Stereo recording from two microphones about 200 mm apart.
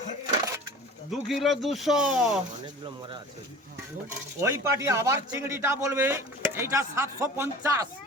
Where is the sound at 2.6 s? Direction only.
25° right (ahead or behind).